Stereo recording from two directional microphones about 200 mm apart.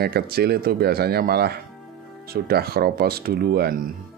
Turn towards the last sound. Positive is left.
turn(degrees=-50)  # may be behind; listen again after turning